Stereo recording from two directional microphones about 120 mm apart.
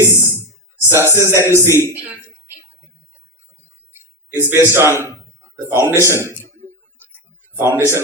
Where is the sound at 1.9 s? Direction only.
15° right (ahead or behind).